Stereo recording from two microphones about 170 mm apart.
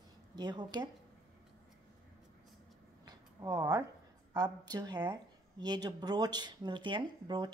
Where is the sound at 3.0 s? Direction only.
20° right (ahead or behind).